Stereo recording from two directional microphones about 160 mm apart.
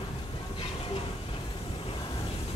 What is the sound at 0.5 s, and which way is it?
Train, 35° left (ahead or behind).